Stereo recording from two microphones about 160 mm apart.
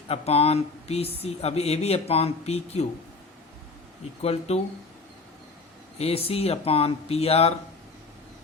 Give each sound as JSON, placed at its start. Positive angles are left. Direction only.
{"t": 0.1, "sound": "speech", "side_deg": 40}
{"t": 4.2, "sound": "speech", "side_deg": 40}
{"t": 6.0, "sound": "speech", "side_deg": 35}